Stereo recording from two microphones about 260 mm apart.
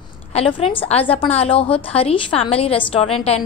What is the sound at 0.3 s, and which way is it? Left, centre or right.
A woman's voice, left.